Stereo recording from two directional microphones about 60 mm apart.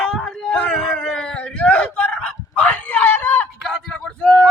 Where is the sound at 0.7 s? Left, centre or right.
Centre; by 3.5 s left.